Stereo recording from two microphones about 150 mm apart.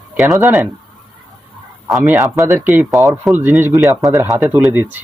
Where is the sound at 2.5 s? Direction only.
15° right (ahead or behind).